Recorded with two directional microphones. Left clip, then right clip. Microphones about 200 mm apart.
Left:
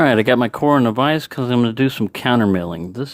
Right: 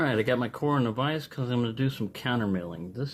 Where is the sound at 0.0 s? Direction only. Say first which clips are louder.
Left 12 dB; 40° left (ahead or behind).